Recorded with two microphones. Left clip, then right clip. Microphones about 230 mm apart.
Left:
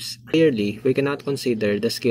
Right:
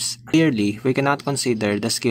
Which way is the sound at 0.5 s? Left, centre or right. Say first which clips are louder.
Even; right.